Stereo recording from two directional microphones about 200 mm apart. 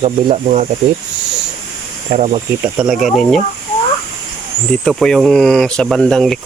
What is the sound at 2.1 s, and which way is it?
Speech, 30° right (ahead or behind).